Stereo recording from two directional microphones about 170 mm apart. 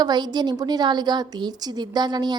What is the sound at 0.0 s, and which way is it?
A woman's voice, 25° right (ahead or behind).